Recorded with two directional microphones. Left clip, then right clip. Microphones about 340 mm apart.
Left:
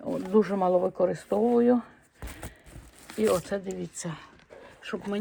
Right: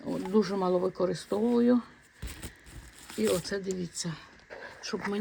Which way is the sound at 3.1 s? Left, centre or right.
Centre.